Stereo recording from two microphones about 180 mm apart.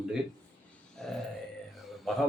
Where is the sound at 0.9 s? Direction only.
Centre (ahead or behind).